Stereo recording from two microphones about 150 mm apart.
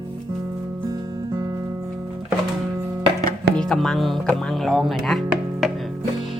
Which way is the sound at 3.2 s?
75° right (ahead or behind).